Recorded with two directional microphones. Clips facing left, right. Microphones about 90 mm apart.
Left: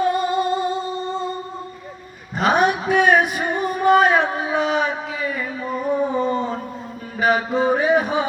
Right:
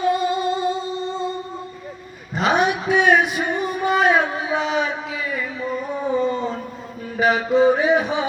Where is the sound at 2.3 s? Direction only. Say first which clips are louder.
Left 1 dB; 45° left (ahead or behind).